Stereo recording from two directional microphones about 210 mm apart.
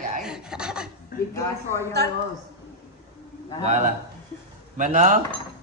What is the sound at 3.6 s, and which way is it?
A man's voice, 35° right (ahead or behind).